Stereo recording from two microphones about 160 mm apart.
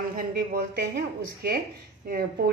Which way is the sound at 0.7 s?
85° right.